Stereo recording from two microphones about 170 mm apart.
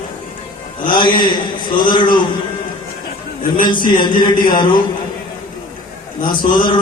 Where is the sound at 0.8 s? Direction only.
25° left (ahead or behind).